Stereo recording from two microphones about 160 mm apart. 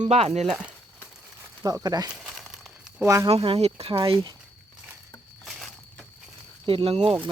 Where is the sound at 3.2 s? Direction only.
35° right (ahead or behind).